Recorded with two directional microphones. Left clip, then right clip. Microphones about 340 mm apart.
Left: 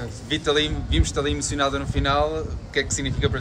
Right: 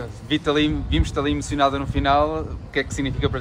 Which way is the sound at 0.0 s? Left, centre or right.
Right.